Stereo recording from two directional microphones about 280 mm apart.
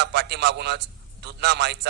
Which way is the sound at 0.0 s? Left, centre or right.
Right.